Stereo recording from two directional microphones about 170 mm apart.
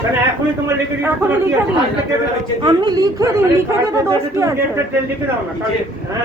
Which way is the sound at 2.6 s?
25° right (ahead or behind).